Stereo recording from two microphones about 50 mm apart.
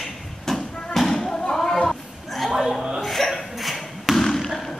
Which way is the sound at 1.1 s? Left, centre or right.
Centre.